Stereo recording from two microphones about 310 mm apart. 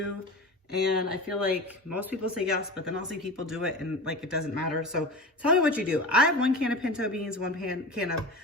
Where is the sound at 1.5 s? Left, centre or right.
Centre.